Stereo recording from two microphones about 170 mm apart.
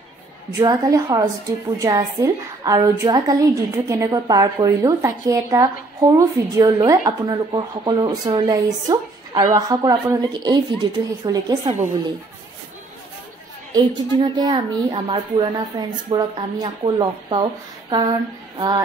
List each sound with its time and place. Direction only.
0.5 s a woman's voice: 20° right (ahead or behind)
14.2 s a woman's voice: 25° right (ahead or behind)